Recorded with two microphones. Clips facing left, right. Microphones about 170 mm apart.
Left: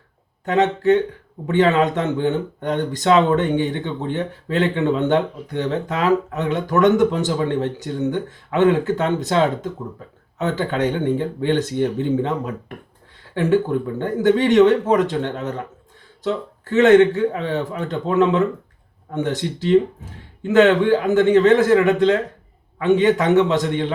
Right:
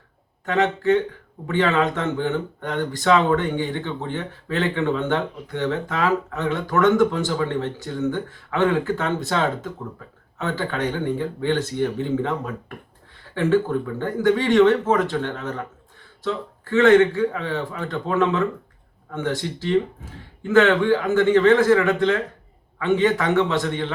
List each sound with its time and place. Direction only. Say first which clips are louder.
0.4 s speech: left 3 dB; 20° left (ahead or behind)